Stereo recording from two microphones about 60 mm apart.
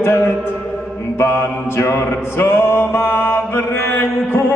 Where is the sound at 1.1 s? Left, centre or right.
Left.